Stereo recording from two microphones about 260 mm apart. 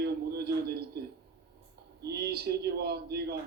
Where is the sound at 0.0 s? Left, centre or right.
Right.